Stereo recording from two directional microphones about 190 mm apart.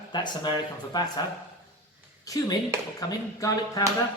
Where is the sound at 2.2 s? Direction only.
15° left (ahead or behind).